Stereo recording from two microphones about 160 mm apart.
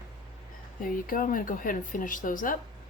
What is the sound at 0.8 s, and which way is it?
Speech, 60° left (ahead or behind).